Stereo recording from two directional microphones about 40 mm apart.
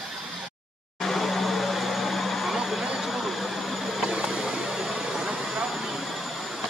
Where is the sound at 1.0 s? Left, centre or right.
Centre.